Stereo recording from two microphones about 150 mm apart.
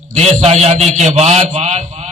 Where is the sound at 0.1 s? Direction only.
50° right (ahead or behind).